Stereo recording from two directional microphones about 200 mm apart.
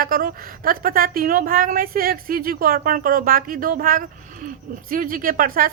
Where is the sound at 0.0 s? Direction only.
45° right (ahead or behind).